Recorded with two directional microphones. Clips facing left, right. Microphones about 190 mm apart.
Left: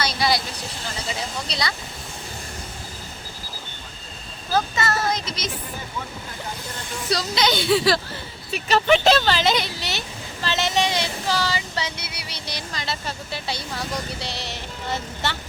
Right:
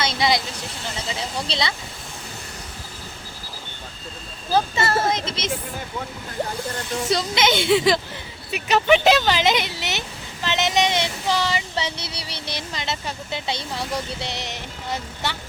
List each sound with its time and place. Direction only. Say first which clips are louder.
0.0 s speech: right 1 dB; 20° right (ahead or behind)
4.5 s speech: right 2 dB; 30° right (ahead or behind)
7.1 s speech: right 1 dB; 25° right (ahead or behind)